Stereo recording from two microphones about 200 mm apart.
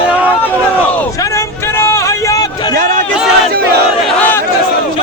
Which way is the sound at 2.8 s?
40° right (ahead or behind).